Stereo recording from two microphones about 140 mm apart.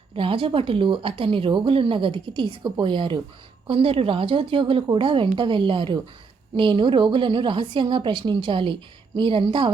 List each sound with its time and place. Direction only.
0.2 s a woman's voice: 40° right (ahead or behind)